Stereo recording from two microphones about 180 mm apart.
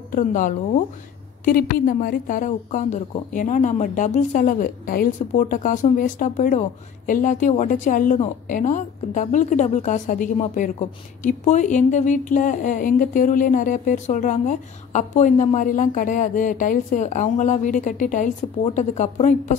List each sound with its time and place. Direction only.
0.1 s a woman's voice: 45° left (ahead or behind)